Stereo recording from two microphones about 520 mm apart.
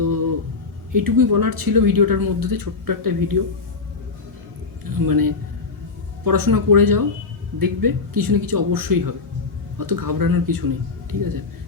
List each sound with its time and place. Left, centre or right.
0.9 s speech: right
4.9 s speech: right